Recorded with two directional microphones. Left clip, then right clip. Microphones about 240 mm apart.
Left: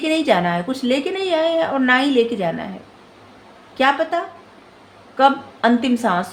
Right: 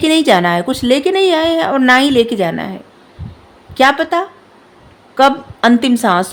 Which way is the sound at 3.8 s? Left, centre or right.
Right.